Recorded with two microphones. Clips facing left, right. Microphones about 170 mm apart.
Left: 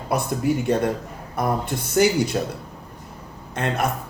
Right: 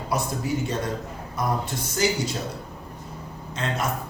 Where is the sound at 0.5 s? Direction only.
60° left (ahead or behind).